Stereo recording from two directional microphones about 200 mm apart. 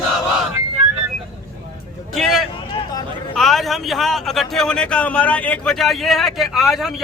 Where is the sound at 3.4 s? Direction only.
Centre (ahead or behind).